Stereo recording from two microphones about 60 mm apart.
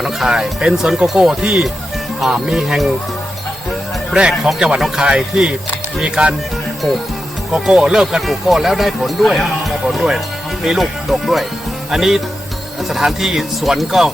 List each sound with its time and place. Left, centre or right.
0.0 s speech: centre
4.1 s speech: centre
7.7 s speech: centre
8.2 s speech: centre